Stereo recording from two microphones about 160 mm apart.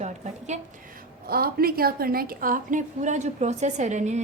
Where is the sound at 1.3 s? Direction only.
70° right (ahead or behind).